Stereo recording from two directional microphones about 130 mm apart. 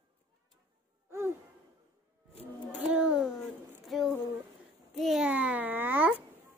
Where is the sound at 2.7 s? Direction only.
10° right (ahead or behind).